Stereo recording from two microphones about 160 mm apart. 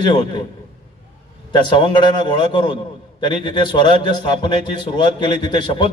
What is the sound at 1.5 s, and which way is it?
A man's voice, 30° left (ahead or behind).